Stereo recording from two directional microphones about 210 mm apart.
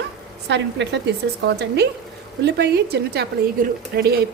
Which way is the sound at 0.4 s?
55° right (ahead or behind).